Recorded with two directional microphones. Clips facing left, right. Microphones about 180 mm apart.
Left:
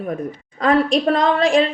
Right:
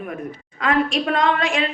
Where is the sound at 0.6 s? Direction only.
35° left (ahead or behind).